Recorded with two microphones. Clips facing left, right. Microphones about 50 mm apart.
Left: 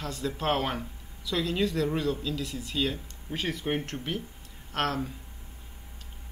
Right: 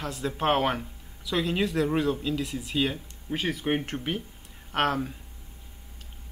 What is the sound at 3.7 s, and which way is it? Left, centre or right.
Speech, right.